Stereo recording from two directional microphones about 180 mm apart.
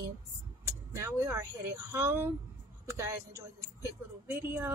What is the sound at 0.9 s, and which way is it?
Speech, 15° right (ahead or behind).